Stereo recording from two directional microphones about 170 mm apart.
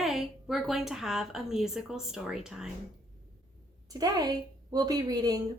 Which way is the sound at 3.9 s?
20° right (ahead or behind).